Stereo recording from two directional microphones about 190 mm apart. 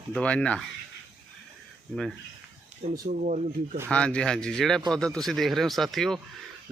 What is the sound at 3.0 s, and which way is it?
Speech, 40° right (ahead or behind).